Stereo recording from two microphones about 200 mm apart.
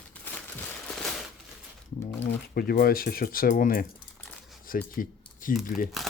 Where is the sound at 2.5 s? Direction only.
50° left (ahead or behind).